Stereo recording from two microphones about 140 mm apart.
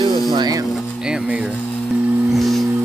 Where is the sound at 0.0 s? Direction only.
30° right (ahead or behind).